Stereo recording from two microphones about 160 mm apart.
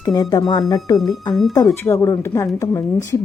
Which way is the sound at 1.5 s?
20° left (ahead or behind).